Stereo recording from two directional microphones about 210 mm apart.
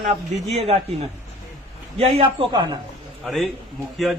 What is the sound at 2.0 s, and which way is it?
Speech, 25° right (ahead or behind).